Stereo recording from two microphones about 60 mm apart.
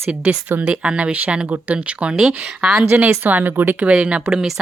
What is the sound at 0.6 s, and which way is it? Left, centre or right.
Speech, centre.